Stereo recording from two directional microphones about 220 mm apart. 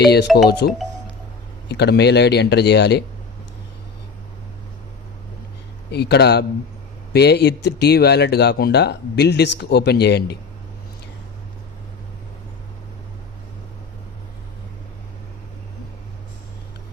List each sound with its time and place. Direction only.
0.0 s speech: 50° left (ahead or behind)
5.9 s speech: 50° left (ahead or behind)